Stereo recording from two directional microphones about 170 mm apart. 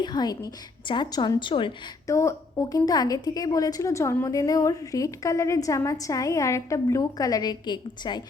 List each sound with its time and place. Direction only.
0.0 s a woman's voice: 25° left (ahead or behind)
2.0 s a woman's voice: 15° left (ahead or behind)